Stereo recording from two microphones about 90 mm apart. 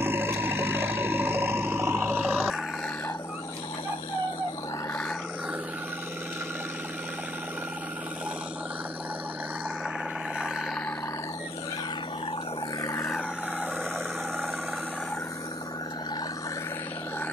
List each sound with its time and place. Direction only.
0.0 s grunt: 25° right (ahead or behind)
2.3 s music: 5° right (ahead or behind)